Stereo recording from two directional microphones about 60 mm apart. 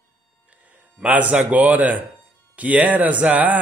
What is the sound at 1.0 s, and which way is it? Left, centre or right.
Speech, right.